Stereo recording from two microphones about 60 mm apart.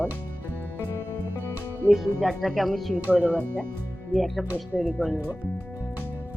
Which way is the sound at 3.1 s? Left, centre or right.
Right.